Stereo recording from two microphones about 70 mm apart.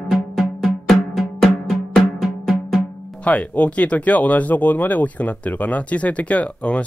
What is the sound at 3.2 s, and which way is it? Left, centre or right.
Speech, left.